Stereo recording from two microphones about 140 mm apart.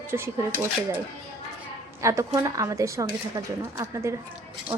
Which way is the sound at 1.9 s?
20° right (ahead or behind).